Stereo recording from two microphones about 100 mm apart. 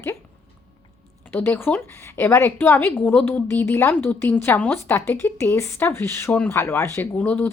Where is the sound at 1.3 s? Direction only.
20° left (ahead or behind).